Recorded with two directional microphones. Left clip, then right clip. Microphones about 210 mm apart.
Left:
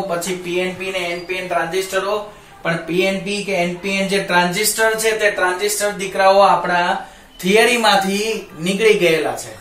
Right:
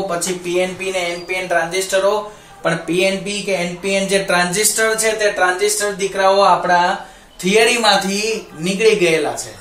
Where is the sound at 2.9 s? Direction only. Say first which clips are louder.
Even; 50° right (ahead or behind).